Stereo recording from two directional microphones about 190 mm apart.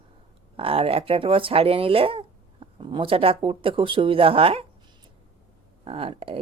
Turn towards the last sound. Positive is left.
turn(degrees=-30)  # may be behind; listen again after turning